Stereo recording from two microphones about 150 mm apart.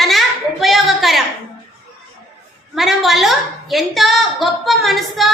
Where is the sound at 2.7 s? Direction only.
Centre (ahead or behind).